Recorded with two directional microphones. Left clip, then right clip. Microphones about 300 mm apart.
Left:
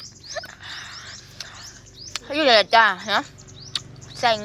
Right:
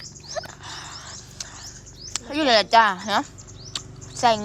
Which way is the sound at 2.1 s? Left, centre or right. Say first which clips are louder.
Left 2 dB; centre.